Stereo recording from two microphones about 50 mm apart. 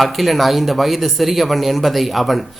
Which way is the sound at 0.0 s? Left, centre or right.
Centre.